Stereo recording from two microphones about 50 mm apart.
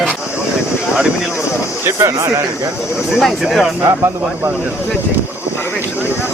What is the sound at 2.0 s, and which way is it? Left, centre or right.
Speech, right.